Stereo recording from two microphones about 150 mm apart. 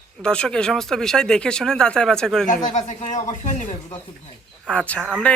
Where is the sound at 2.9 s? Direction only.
50° left (ahead or behind).